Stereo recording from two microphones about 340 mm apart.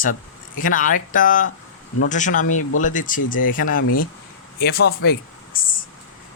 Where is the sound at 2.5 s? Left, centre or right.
Left.